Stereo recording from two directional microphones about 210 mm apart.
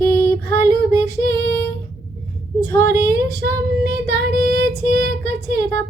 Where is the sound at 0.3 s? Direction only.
50° right (ahead or behind).